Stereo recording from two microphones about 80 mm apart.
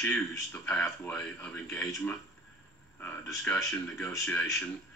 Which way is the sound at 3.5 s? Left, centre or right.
Centre.